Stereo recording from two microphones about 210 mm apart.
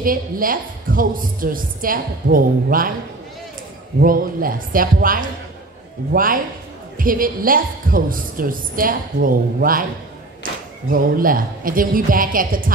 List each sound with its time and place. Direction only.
0.0 s a woman's voice: 40° right (ahead or behind)
4.0 s a woman's voice: 40° right (ahead or behind)
10.9 s a woman's voice: 40° right (ahead or behind)